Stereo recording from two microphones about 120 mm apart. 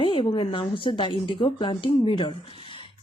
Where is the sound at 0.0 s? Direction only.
45° left (ahead or behind).